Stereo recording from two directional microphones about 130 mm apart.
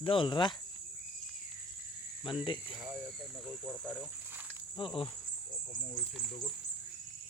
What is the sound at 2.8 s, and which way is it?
Cricket, 15° right (ahead or behind).